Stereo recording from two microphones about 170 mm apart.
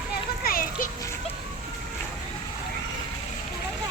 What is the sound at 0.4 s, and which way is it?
Music, 60° left (ahead or behind).